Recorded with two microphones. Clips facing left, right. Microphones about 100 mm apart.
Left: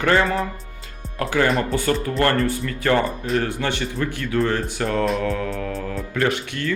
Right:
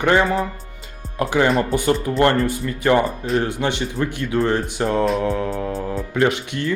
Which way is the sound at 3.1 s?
Centre (ahead or behind).